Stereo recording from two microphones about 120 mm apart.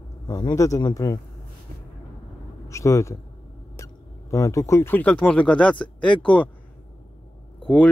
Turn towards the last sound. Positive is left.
turn(degrees=10)  # may be behind; listen again after turning